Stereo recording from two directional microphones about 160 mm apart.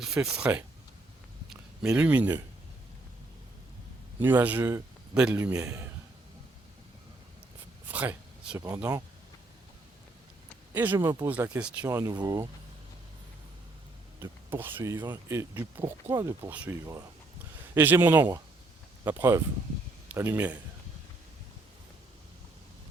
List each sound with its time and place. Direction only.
0.0 s speech: 5° right (ahead or behind)
1.9 s speech: 10° right (ahead or behind)
4.2 s speech: 10° right (ahead or behind)
7.9 s a sound: 10° right (ahead or behind)
10.8 s speech: 10° right (ahead or behind)
11.9 s speech: 20° right (ahead or behind)
14.2 s speech: 15° right (ahead or behind)